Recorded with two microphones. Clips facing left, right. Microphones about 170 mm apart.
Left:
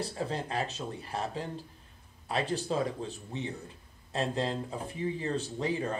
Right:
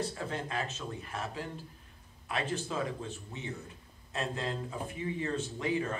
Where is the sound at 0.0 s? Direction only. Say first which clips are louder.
Left 2 dB; 35° left (ahead or behind).